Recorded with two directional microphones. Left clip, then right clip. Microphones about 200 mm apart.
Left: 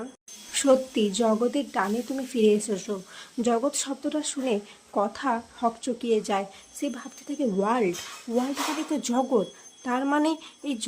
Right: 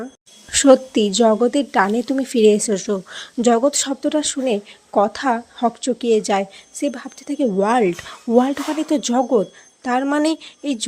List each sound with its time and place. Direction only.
0.5 s a woman's voice: 30° right (ahead or behind)